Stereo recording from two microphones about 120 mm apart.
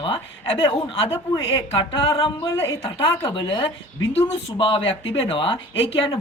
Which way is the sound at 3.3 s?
45° left (ahead or behind).